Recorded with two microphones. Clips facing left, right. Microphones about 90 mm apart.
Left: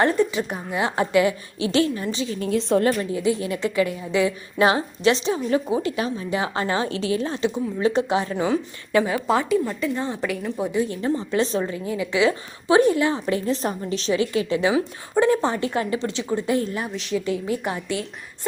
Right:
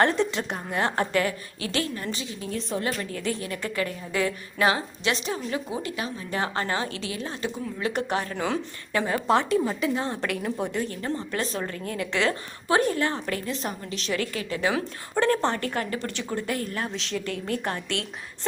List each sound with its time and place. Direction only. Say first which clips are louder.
0.0 s speech: left 3 dB; 5° left (ahead or behind); by 1.9 s 25° left (ahead or behind)
2.6 s a woman's voice: left 10 dB; 80° left
3.0 s a woman's voice: left 7 dB; 15° left (ahead or behind)
6.3 s a woman's voice: left 3 dB; 15° left (ahead or behind)
9.0 s a woman's voice: left 1 dB; 5° left (ahead or behind)
11.0 s speech: left 7 dB; 15° left (ahead or behind)
12.6 s speech: left 6 dB; 20° left (ahead or behind)
13.4 s a woman's voice: left 7 dB; 35° left (ahead or behind)
14.1 s a woman's voice: left 7 dB; 20° left (ahead or behind)
14.7 s speech: left 5 dB; 10° left (ahead or behind)
16.8 s speech: left 5 dB; 5° left (ahead or behind)